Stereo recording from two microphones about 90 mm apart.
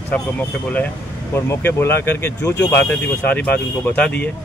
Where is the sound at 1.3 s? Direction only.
25° left (ahead or behind).